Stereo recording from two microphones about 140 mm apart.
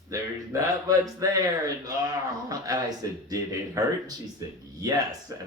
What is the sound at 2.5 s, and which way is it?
Speech, 25° right (ahead or behind).